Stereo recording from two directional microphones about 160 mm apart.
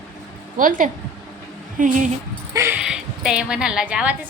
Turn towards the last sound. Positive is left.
turn(degrees=-5)  # may be behind; listen again after turning